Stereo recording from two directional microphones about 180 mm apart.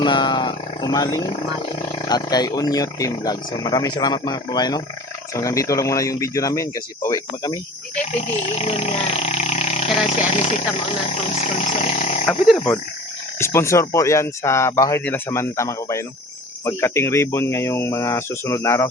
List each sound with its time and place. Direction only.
0.0 s speech: 25° left (ahead or behind)
8.1 s speech: 40° left (ahead or behind)
13.4 s speech: 15° left (ahead or behind)